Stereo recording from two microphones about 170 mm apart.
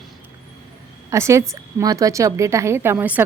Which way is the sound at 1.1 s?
15° right (ahead or behind).